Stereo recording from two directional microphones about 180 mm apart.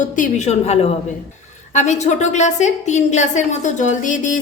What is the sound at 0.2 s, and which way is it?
A woman's voice, 40° left (ahead or behind).